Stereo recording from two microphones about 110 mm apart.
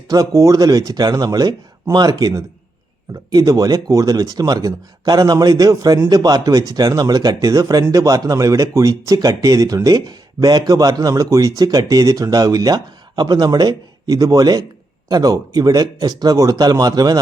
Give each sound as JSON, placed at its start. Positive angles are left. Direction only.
{"t": 0.1, "sound": "speech", "side_deg": -30}